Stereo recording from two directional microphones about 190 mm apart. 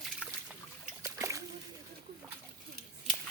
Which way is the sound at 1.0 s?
15° right (ahead or behind).